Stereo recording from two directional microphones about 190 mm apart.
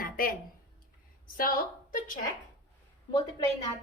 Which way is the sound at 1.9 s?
45° left (ahead or behind).